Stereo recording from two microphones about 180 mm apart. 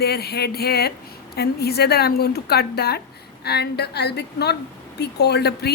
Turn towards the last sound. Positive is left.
turn(degrees=65)  # may be behind; listen again after turning